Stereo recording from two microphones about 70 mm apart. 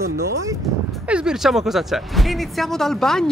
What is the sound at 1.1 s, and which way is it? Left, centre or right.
Speech, centre.